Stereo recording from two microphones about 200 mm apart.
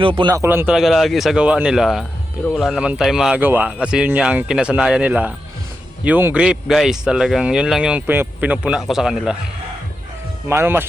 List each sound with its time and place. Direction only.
0.0 s speech: 25° right (ahead or behind)
0.3 s speech: 10° right (ahead or behind)
10.5 s speech: 10° right (ahead or behind)